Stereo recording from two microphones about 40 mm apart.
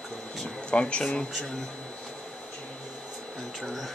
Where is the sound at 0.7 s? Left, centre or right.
Left.